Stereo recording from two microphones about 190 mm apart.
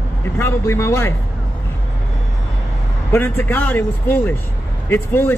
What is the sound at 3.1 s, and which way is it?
A man's voice, 10° left (ahead or behind).